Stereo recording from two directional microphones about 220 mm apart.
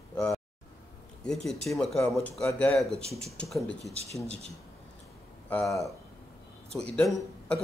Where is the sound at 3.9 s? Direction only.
30° right (ahead or behind).